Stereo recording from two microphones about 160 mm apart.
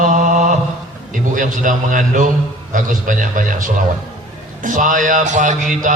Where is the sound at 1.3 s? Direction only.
55° right (ahead or behind).